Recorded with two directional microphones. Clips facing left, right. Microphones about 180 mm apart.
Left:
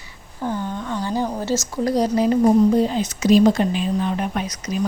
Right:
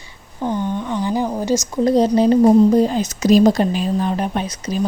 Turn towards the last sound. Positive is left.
turn(degrees=-30)  # may be behind; listen again after turning